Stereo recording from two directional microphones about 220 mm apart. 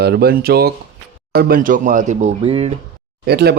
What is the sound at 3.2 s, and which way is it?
Speech, 45° right (ahead or behind).